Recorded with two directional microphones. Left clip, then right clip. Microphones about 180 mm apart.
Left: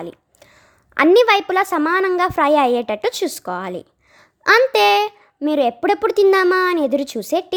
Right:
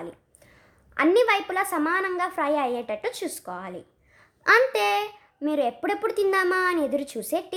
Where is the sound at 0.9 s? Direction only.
40° left (ahead or behind).